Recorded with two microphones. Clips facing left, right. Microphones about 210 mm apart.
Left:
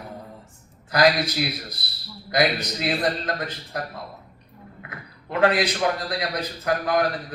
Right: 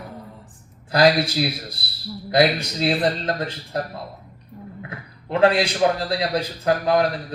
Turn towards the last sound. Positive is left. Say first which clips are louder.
# right 3 dB
turn(degrees=-30)  # may be behind; listen again after turning